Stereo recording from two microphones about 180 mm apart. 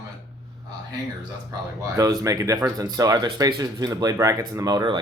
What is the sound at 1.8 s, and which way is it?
Speech, 20° right (ahead or behind).